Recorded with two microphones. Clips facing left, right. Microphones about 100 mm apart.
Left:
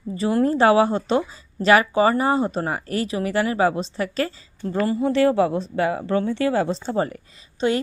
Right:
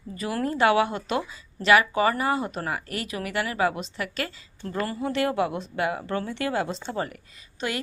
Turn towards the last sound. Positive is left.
turn(degrees=25)  # may be behind; listen again after turning